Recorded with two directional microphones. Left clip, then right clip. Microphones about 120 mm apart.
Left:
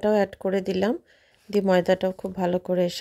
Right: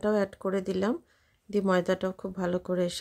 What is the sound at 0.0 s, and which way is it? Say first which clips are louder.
Speech: left 6 dB; 25° left (ahead or behind).